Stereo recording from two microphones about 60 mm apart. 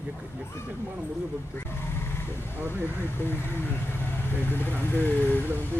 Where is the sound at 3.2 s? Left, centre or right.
Left.